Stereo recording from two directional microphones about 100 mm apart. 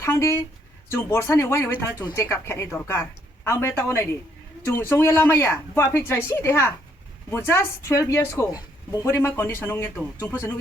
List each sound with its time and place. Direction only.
0.0 s speech: 30° left (ahead or behind)
9.0 s speech: 25° left (ahead or behind)